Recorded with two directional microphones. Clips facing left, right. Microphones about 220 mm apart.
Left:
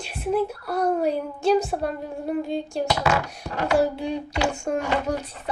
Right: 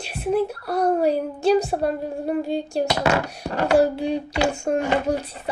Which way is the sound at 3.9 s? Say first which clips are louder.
Right 3 dB; 30° right (ahead or behind).